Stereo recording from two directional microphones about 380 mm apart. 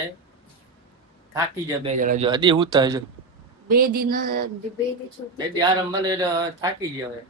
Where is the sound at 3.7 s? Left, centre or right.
Right.